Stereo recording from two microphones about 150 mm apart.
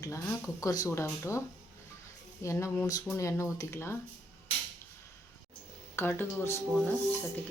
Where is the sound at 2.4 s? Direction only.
20° left (ahead or behind).